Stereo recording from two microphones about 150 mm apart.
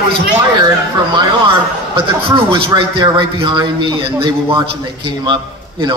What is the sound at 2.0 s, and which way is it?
A man's voice, 35° right (ahead or behind).